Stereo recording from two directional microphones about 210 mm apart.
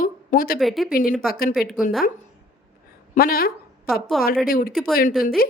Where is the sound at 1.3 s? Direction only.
45° left (ahead or behind).